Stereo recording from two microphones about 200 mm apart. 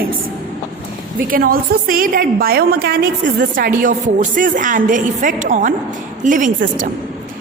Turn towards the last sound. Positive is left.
turn(degrees=-40)  # may be behind; listen again after turning